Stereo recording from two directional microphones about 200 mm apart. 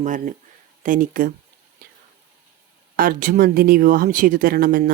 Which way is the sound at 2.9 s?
45° right (ahead or behind).